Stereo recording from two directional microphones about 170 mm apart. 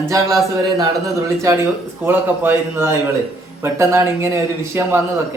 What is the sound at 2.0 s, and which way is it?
Speech, 10° right (ahead or behind).